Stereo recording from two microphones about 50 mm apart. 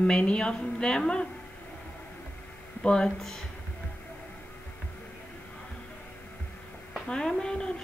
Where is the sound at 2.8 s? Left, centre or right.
Centre.